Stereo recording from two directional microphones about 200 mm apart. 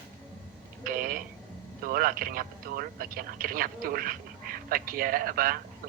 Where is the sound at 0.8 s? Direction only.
45° right (ahead or behind).